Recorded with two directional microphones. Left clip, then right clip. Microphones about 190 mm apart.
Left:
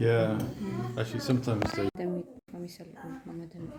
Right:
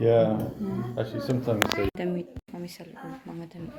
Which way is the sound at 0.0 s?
55° left (ahead or behind).